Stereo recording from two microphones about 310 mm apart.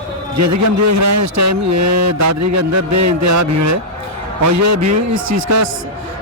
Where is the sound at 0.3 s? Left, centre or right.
Right.